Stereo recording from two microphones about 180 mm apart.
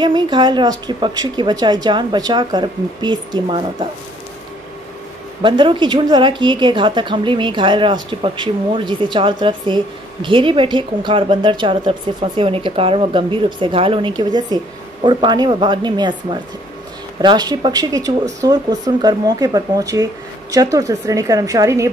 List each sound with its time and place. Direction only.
0.0 s speech: 25° right (ahead or behind)
5.4 s speech: 25° right (ahead or behind)